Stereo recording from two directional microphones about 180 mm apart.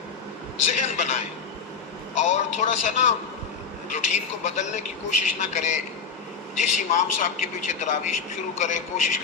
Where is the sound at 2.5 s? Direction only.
40° left (ahead or behind).